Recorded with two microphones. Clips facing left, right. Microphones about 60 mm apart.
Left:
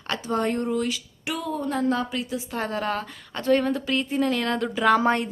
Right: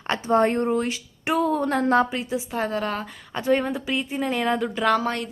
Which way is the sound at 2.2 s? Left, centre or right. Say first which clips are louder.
Right 2 dB; right.